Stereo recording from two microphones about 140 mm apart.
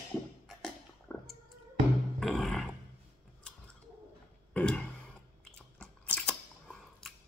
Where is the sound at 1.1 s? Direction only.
20° left (ahead or behind).